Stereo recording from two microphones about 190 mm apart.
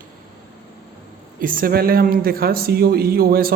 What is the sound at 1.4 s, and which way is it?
Speech, 50° right (ahead or behind).